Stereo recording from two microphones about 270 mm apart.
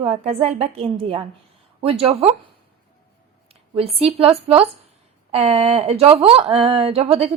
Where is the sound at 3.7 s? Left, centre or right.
Right.